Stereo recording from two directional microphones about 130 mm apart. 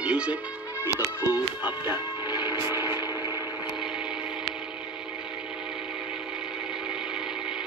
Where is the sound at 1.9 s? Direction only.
20° right (ahead or behind).